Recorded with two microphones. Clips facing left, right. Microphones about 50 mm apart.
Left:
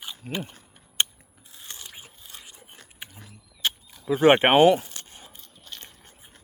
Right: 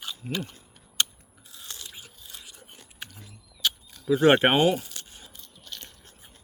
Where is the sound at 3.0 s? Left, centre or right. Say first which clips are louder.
Right 1 dB; centre.